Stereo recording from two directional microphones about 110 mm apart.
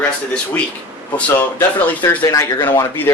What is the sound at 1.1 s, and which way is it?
A man's voice, 20° left (ahead or behind).